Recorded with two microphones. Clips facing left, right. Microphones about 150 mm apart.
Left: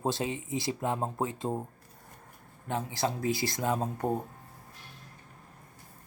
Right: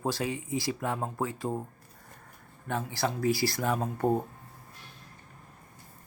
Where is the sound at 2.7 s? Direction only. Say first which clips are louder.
Even; 20° left (ahead or behind).